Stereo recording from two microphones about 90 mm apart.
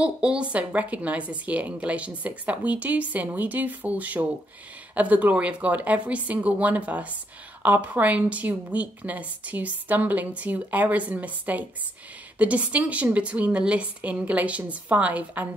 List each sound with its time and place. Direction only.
0.0 s a woman's voice: 10° right (ahead or behind)